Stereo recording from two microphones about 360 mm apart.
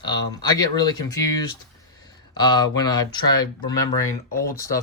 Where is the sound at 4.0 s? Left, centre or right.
Centre.